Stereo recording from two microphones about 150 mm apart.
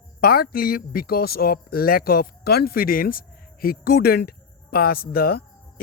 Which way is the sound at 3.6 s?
85° left.